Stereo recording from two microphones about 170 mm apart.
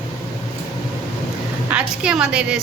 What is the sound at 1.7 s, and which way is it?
Speech, 5° right (ahead or behind).